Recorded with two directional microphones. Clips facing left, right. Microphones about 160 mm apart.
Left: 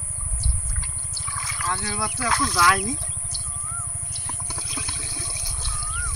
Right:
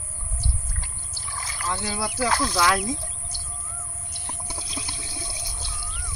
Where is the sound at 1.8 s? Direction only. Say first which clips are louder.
Right 2 dB; 30° right (ahead or behind).